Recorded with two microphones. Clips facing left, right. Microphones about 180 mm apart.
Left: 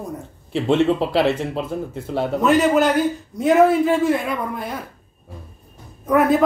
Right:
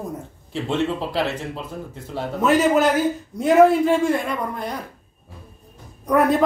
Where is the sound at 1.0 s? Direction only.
65° left (ahead or behind).